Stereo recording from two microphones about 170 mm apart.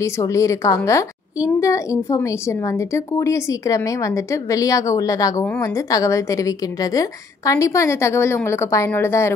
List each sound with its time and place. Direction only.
0.0 s a woman's voice: 20° left (ahead or behind)